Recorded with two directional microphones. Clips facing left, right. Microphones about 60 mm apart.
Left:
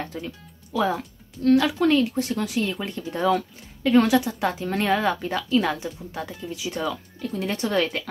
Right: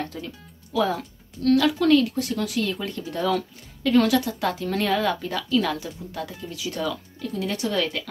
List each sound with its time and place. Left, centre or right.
0.0 s music: centre
0.7 s speech: centre
7.3 s speech: left